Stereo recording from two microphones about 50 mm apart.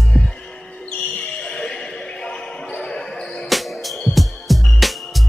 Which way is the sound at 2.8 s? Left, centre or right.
Centre.